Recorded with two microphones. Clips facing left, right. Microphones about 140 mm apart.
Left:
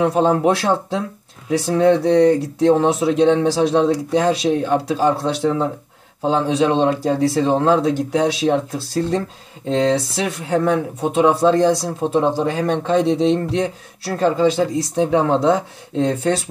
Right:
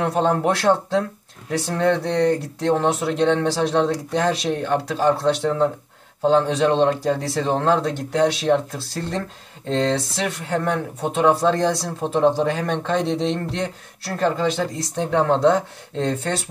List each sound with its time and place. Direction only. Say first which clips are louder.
0.0 s speech: left 4 dB; 10° left (ahead or behind)